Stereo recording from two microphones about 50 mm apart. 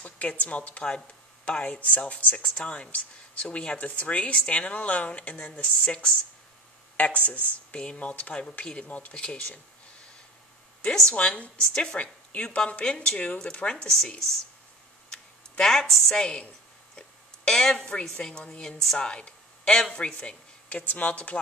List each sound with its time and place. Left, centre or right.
0.0 s speech: left
9.1 s a woman's voice: centre
11.1 s a woman's voice: left
15.6 s a woman's voice: centre
16.2 s a woman's voice: centre
17.5 s a woman's voice: centre
20.6 s speech: left